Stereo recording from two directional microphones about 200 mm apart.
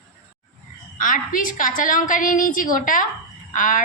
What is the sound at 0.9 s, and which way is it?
A woman's voice, 40° left (ahead or behind).